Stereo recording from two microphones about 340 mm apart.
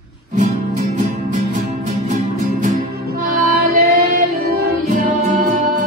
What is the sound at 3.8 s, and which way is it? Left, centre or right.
Child singing, right.